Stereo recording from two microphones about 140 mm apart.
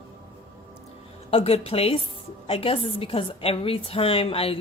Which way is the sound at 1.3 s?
45° left (ahead or behind).